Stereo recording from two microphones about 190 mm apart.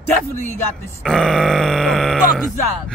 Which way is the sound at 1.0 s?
5° left (ahead or behind).